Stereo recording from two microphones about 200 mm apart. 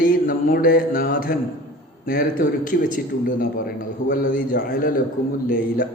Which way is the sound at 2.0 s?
45° left (ahead or behind).